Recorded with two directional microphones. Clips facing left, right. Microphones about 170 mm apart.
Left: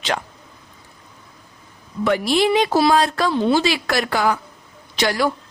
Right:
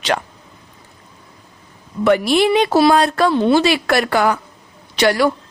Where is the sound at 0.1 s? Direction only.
60° right (ahead or behind).